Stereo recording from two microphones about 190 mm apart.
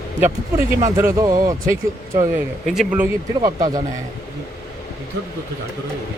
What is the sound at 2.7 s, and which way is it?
Speech, 5° right (ahead or behind).